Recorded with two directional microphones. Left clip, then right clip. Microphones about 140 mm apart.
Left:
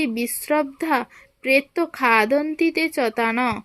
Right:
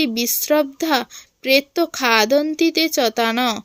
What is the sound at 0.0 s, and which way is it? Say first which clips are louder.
A woman's voice: right 4 dB; 30° right (ahead or behind).